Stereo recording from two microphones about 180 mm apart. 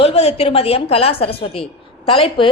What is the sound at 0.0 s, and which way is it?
A woman's voice, 35° left (ahead or behind).